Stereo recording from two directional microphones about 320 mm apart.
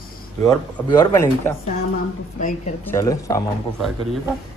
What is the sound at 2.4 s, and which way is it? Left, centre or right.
Speech, left.